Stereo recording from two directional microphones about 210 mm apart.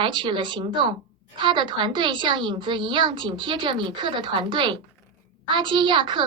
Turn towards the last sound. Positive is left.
turn(degrees=-20)  # may be behind; listen again after turning